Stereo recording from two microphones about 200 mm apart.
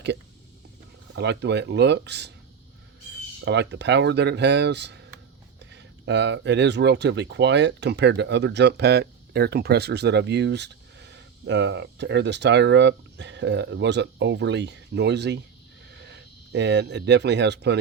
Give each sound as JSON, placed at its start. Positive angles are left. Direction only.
{"t": 1.1, "sound": "speech", "side_deg": -60}
{"t": 3.4, "sound": "speech", "side_deg": -60}